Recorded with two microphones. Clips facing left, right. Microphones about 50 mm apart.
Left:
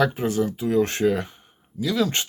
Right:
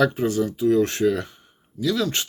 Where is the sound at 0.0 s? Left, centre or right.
Centre.